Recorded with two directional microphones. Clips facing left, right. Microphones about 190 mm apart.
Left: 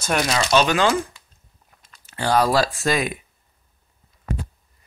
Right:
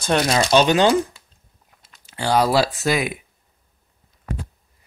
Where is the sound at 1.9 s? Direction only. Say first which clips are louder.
Even; 10° right (ahead or behind).